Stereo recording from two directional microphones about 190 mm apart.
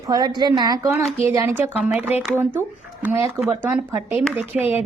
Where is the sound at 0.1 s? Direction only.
20° right (ahead or behind).